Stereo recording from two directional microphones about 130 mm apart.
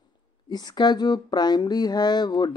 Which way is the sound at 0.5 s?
30° left (ahead or behind).